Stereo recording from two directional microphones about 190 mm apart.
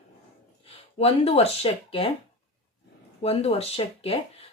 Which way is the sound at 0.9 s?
30° left (ahead or behind).